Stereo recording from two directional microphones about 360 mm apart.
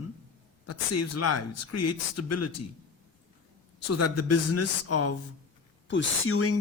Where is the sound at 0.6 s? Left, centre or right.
Left.